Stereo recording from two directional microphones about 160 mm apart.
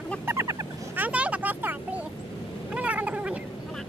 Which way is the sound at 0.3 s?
20° right (ahead or behind).